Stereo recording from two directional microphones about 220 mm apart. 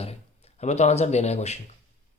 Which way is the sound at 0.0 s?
25° left (ahead or behind).